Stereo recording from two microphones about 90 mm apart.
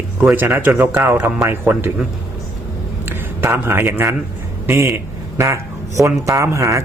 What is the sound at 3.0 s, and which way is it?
A man's voice, 25° right (ahead or behind).